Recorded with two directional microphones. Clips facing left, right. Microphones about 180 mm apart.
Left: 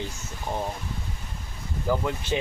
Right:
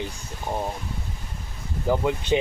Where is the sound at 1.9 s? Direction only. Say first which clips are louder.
Right 4 dB; 20° right (ahead or behind).